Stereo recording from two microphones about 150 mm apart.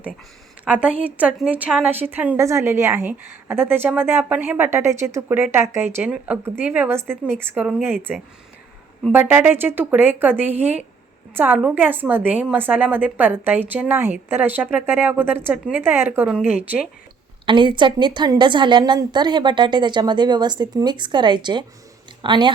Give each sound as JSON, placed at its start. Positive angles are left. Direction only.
{"t": 0.6, "sound": "a woman's voice", "side_deg": -10}
{"t": 9.1, "sound": "a woman's voice", "side_deg": -10}
{"t": 17.4, "sound": "a woman's voice", "side_deg": -35}